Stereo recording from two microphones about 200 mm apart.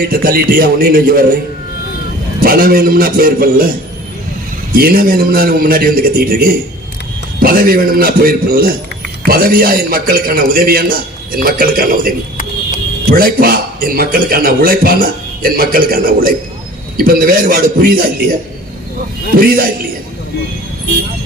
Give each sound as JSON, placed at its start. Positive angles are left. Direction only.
{"t": 0.1, "sound": "a man's voice", "side_deg": -45}
{"t": 2.4, "sound": "a man's voice", "side_deg": -45}
{"t": 4.7, "sound": "a man's voice", "side_deg": -50}